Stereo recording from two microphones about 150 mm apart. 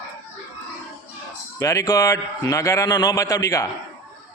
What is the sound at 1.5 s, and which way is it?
A man's voice, 20° left (ahead or behind).